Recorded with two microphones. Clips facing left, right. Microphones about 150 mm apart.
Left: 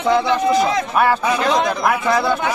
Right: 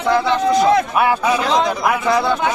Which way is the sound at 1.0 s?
5° right (ahead or behind).